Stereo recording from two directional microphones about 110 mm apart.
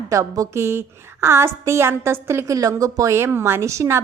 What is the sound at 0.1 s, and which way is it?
A woman's voice, 30° right (ahead or behind).